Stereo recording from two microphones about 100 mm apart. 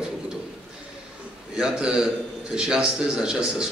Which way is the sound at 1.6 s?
5° right (ahead or behind).